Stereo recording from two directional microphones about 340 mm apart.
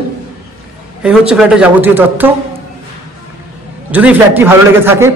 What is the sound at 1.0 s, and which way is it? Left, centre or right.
Speech, centre.